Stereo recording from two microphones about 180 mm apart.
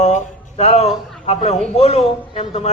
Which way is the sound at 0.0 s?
35° left (ahead or behind).